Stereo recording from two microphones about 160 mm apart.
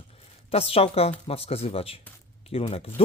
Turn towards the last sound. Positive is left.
turn(degrees=40)  # may be behind; listen again after turning